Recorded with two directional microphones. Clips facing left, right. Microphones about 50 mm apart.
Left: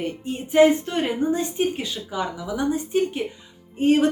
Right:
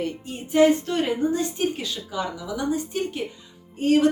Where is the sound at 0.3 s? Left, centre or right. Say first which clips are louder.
Left 2 dB; left.